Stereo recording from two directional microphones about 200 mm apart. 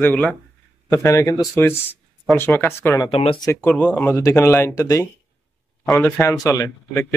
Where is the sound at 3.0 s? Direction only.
30° left (ahead or behind).